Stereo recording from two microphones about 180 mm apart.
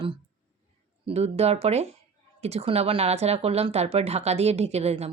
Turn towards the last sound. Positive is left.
turn(degrees=-35)  # may be behind; listen again after turning